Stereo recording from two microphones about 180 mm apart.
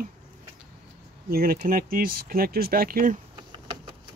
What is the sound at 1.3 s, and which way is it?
Speech, 55° right (ahead or behind).